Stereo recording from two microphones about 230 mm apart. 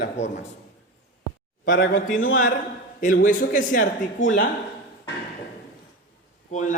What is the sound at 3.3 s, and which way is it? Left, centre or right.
Speech, left.